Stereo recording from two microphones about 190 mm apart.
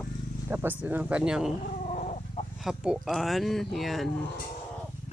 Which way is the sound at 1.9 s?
40° left (ahead or behind).